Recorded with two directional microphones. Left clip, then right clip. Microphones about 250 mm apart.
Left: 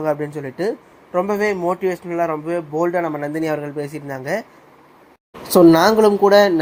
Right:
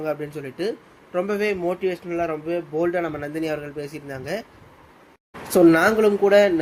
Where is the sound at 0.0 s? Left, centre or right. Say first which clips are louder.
Left 6 dB; centre.